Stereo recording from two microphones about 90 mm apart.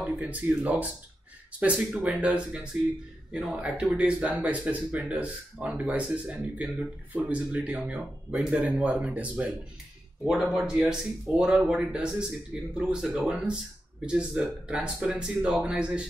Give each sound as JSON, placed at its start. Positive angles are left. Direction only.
{"t": 0.0, "sound": "speech", "side_deg": -15}
{"t": 10.5, "sound": "speech", "side_deg": -5}